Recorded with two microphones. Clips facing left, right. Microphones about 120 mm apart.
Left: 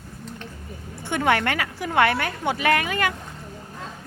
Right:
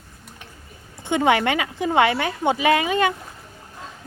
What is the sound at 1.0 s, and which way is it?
Speech, 20° right (ahead or behind).